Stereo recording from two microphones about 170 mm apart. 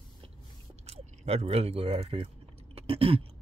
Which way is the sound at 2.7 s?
35° right (ahead or behind).